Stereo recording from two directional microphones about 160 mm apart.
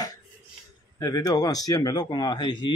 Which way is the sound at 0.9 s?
20° left (ahead or behind).